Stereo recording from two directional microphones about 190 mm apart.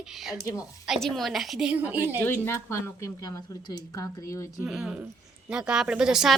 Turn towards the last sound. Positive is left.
turn(degrees=-5)  # may be behind; listen again after turning